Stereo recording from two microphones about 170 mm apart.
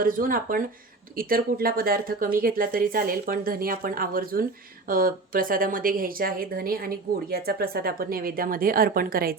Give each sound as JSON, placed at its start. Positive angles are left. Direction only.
{"t": 0.0, "sound": "speech", "side_deg": -55}